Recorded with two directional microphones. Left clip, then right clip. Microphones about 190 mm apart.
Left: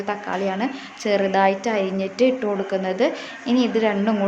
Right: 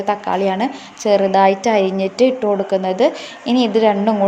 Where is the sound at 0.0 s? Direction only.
20° right (ahead or behind).